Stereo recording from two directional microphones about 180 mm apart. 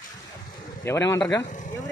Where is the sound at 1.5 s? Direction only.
45° left (ahead or behind).